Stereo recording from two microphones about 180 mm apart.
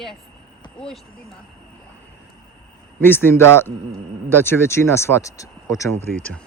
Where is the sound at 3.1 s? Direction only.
10° left (ahead or behind).